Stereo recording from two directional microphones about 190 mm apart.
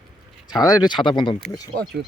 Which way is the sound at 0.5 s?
20° left (ahead or behind).